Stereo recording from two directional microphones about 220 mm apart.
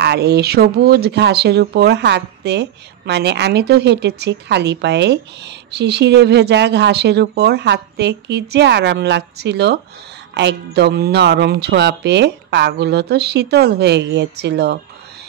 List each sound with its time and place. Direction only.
0.0 s speech: 50° right (ahead or behind)